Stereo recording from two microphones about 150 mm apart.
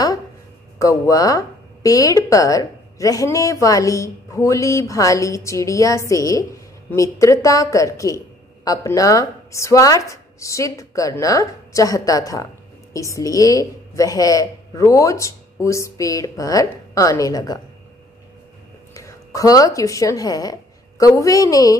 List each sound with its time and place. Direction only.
0.7 s speech: 20° left (ahead or behind)
18.9 s speech: 20° left (ahead or behind)